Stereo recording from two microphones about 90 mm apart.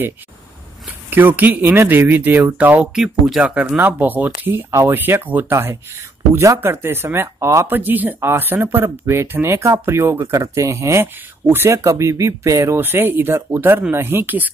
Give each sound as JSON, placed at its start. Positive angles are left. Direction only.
{"t": 0.8, "sound": "speech", "side_deg": -20}
{"t": 2.9, "sound": "speech", "side_deg": -5}
{"t": 3.4, "sound": "speech", "side_deg": -15}
{"t": 4.6, "sound": "speech", "side_deg": -35}
{"t": 4.9, "sound": "speech", "side_deg": -20}